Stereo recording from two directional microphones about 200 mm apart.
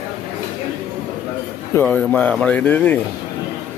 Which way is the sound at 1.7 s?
5° left (ahead or behind).